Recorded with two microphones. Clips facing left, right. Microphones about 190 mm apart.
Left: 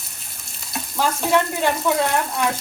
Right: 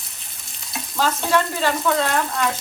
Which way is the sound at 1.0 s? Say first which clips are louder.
Left 1 dB; 15° left (ahead or behind).